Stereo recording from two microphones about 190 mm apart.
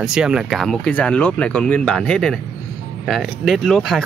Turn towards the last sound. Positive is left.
turn(degrees=0)  # may be behind; listen again after turning